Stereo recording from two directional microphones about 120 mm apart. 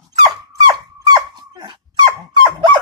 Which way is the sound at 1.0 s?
35° right (ahead or behind).